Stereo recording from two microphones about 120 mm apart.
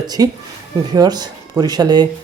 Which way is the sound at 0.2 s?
30° right (ahead or behind).